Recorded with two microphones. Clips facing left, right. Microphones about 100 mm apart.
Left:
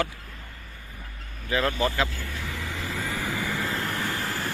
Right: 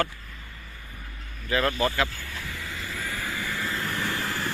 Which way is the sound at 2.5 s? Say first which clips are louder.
Left 4 dB; 90° left.